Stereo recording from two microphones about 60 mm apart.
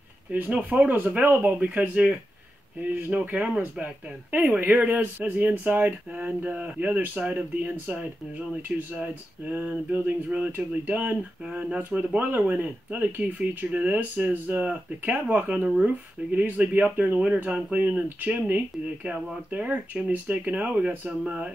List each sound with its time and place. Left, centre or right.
0.6 s speech: right